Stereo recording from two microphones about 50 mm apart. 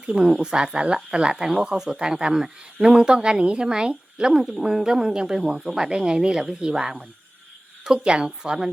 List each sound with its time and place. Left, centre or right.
0.3 s speech: centre